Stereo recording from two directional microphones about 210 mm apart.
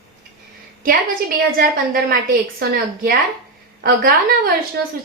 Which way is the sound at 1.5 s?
45° right (ahead or behind).